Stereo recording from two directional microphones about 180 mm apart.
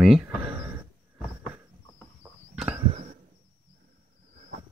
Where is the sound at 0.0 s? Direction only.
Centre (ahead or behind).